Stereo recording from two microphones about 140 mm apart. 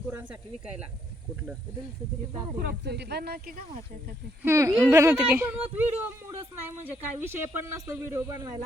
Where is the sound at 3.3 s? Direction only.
90° right.